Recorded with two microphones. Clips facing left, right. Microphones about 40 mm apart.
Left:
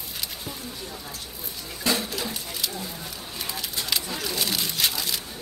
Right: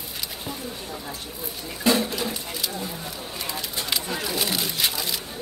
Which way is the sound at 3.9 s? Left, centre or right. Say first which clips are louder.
Right 2 dB; centre.